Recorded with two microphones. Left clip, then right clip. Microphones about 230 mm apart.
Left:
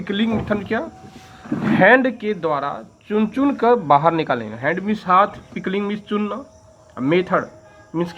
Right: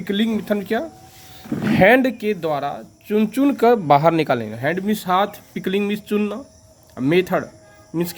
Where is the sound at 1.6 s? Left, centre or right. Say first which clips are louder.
Left 1 dB; right.